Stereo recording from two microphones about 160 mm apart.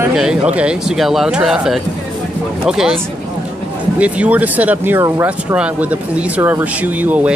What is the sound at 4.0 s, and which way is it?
Speech, 10° right (ahead or behind).